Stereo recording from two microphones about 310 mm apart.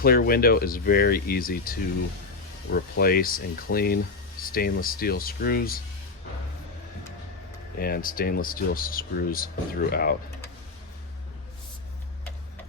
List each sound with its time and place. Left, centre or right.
0.0 s speech: left
7.8 s speech: left